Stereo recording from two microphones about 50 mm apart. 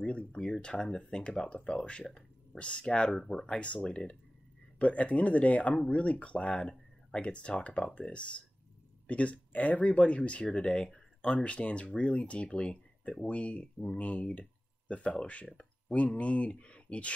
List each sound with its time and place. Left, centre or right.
0.0 s speech: left
3.1 s speech: centre
3.4 s speech: left